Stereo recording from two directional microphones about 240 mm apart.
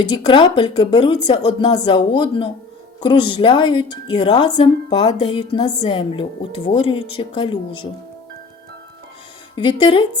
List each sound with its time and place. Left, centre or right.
0.2 s speech: centre
9.6 s speech: centre